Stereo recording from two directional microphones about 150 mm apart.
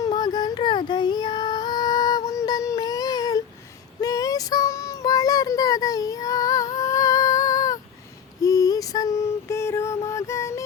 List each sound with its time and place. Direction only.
0.0 s child singing: 30° left (ahead or behind)